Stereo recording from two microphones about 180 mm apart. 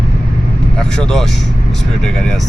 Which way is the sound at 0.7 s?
5° left (ahead or behind).